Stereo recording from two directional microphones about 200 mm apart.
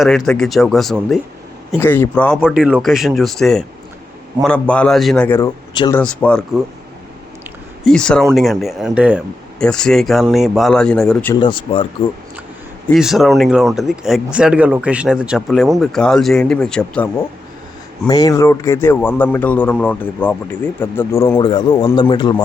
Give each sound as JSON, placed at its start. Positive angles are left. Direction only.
{"t": 0.0, "sound": "a man's voice", "side_deg": 0}
{"t": 2.4, "sound": "speech", "side_deg": -5}
{"t": 5.7, "sound": "speech", "side_deg": 20}
{"t": 6.0, "sound": "speech", "side_deg": 5}
{"t": 7.9, "sound": "speech", "side_deg": 5}
{"t": 11.3, "sound": "speech", "side_deg": 25}
{"t": 12.9, "sound": "speech", "side_deg": 0}
{"t": 18.1, "sound": "a man's voice", "side_deg": 15}